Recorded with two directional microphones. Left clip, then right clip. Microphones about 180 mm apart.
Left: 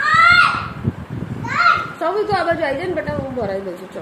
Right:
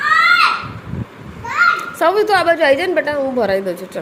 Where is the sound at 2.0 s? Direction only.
55° right (ahead or behind).